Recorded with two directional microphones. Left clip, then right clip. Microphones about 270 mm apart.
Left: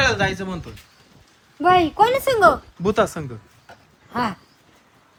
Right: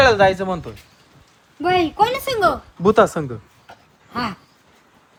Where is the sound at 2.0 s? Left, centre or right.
Left.